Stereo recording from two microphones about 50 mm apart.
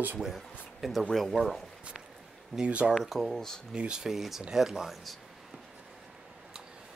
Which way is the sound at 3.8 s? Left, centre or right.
Centre.